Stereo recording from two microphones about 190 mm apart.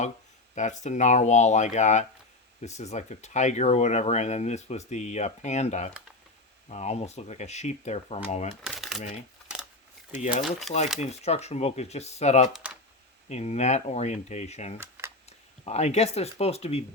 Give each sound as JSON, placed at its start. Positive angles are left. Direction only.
{"t": 0.5, "sound": "speech", "side_deg": 40}
{"t": 8.6, "sound": "shuffling cards", "side_deg": 0}
{"t": 10.1, "sound": "speech", "side_deg": 40}
{"t": 10.7, "sound": "speech", "side_deg": 0}
{"t": 11.0, "sound": "speech", "side_deg": 35}
{"t": 14.8, "sound": "camera", "side_deg": -15}
{"t": 15.3, "sound": "speech", "side_deg": 35}